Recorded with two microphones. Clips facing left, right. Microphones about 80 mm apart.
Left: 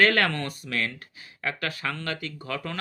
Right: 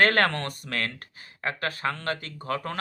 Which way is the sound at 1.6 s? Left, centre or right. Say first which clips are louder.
Right 5 dB; right.